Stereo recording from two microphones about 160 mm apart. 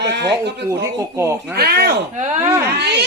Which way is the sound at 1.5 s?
75° right (ahead or behind).